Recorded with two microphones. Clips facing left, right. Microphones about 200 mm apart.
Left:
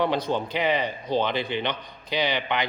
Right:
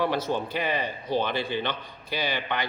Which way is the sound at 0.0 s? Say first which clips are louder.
Left 2 dB; 20° left (ahead or behind).